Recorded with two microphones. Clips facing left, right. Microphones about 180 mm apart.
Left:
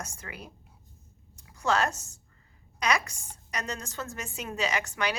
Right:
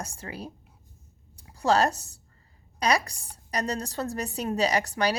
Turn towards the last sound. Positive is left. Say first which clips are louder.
# right 5 dB
turn(degrees=-35)  # may be behind; listen again after turning